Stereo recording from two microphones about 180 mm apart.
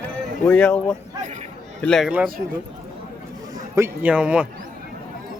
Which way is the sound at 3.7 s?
10° right (ahead or behind).